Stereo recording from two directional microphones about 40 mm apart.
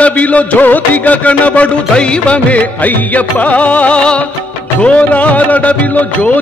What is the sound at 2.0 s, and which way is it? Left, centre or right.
Music, left.